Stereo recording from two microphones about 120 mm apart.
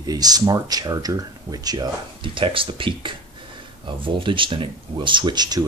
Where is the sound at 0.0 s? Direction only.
35° right (ahead or behind).